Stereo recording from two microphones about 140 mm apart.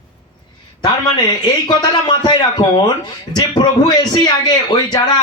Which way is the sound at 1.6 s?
35° left (ahead or behind).